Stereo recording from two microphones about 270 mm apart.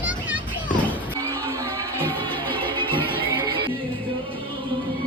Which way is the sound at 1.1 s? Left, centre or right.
Centre.